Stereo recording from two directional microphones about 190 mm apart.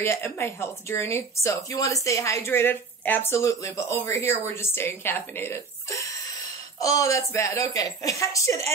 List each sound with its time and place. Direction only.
0.0 s a woman's voice: 15° left (ahead or behind)